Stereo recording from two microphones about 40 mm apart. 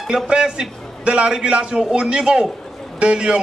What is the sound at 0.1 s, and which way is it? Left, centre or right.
A man's voice, centre.